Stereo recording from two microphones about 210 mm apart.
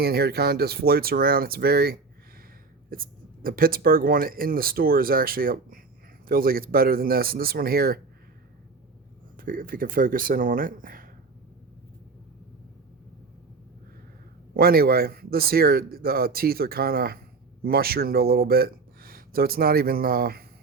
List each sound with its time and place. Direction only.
0.0 s speech: 50° right (ahead or behind)
9.4 s speech: 40° right (ahead or behind)
14.5 s speech: 45° right (ahead or behind)